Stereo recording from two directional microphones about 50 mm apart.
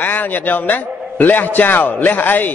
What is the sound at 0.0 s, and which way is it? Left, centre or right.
A man's voice, left.